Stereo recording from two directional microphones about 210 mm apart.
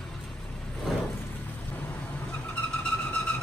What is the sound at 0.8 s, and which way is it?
Vehicle, 10° left (ahead or behind).